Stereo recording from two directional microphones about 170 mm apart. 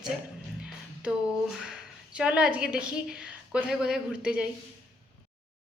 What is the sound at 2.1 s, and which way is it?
A woman's voice, 5° right (ahead or behind).